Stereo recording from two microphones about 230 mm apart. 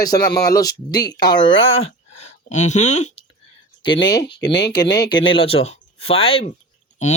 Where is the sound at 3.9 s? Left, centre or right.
Centre.